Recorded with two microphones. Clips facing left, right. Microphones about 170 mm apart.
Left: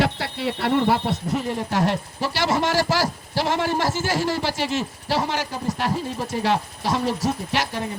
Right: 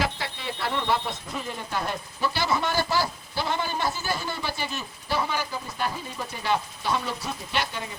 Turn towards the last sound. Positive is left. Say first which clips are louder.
# left 7 dB
turn(degrees=85)